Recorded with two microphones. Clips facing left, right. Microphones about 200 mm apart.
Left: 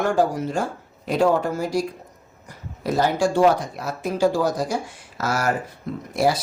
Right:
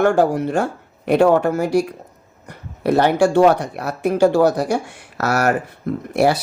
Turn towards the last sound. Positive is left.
turn(degrees=-65)  # may be behind; listen again after turning